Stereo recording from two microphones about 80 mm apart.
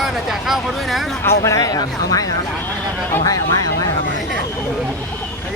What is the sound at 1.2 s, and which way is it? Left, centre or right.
Speech, left.